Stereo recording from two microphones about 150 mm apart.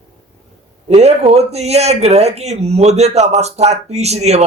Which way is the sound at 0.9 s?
45° right (ahead or behind).